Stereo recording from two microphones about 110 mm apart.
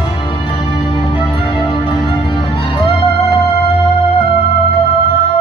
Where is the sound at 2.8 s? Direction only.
60° left (ahead or behind).